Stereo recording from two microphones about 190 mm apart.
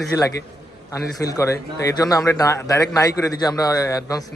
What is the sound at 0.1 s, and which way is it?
Speech, 15° left (ahead or behind).